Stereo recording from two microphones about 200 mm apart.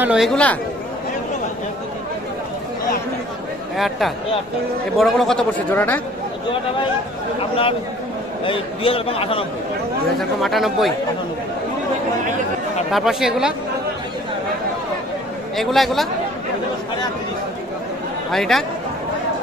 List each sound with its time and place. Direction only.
0.0 s speech: centre (ahead or behind)
3.7 s speech: centre (ahead or behind)
7.3 s a man's voice: 30° left (ahead or behind)
10.1 s speech: centre (ahead or behind)
12.9 s speech: centre (ahead or behind)
15.5 s speech: centre (ahead or behind)
18.3 s speech: centre (ahead or behind)